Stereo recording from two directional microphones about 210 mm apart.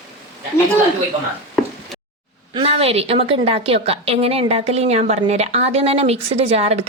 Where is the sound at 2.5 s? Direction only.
25° right (ahead or behind).